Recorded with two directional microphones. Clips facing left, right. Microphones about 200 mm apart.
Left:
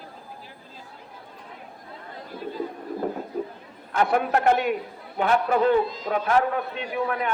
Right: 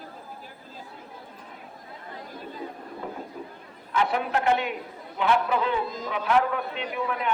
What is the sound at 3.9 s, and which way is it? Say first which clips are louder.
A man's voice: left 3 dB; 50° left (ahead or behind).